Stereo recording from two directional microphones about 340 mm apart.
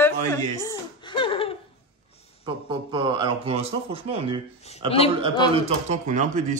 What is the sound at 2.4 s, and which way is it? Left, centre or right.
Speech, centre.